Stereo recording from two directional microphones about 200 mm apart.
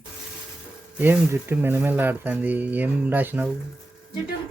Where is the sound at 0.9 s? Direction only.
10° right (ahead or behind).